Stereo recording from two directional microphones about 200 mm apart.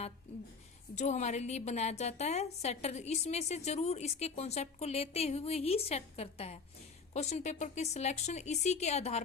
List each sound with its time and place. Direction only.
0.9 s a woman's voice: 35° left (ahead or behind)